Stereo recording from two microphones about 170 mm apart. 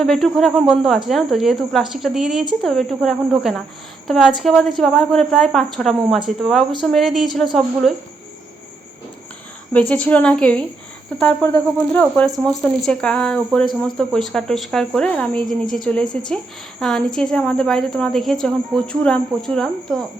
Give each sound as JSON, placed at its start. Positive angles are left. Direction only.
{"t": 0.0, "sound": "speech", "side_deg": 0}
{"t": 9.9, "sound": "a woman's voice", "side_deg": 10}